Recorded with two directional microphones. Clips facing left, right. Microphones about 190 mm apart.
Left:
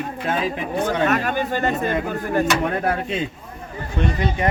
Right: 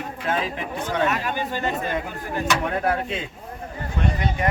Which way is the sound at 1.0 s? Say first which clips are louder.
Left 4 dB; 50° left (ahead or behind).